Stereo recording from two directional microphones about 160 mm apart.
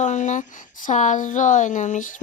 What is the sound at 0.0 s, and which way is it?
Speech, 50° left (ahead or behind).